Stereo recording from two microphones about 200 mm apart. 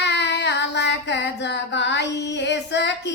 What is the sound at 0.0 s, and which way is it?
Child singing, 60° left (ahead or behind).